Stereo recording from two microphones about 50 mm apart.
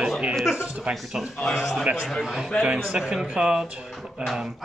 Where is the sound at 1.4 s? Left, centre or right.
Centre.